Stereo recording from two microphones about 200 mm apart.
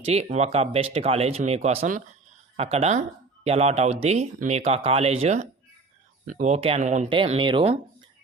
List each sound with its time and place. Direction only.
0.0 s speech: 30° right (ahead or behind)
2.6 s speech: 30° right (ahead or behind)
7.1 s speech: 25° right (ahead or behind)